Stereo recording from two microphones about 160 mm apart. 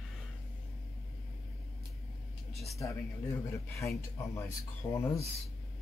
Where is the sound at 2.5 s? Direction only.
Centre (ahead or behind).